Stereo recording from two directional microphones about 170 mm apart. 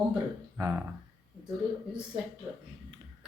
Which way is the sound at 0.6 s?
15° right (ahead or behind).